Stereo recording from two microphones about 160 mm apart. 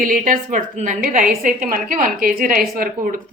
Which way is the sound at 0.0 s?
55° right (ahead or behind).